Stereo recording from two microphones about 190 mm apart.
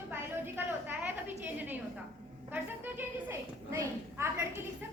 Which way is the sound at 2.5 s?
10° right (ahead or behind).